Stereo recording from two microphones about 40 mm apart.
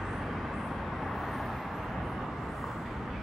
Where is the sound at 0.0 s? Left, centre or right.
Centre.